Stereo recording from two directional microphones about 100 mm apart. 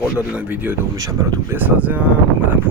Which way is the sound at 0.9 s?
35° right (ahead or behind).